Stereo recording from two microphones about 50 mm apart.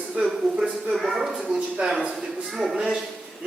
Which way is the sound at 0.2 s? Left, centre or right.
Right.